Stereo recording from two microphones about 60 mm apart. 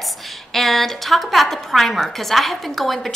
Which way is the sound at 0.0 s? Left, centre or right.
Centre.